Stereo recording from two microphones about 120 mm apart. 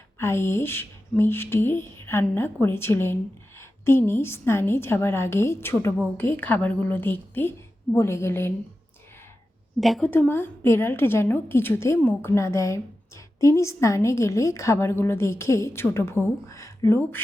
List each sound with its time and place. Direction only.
0.2 s a woman's voice: 20° left (ahead or behind)
9.8 s a woman's voice: centre (ahead or behind)
10.1 s a woman's voice: 20° left (ahead or behind)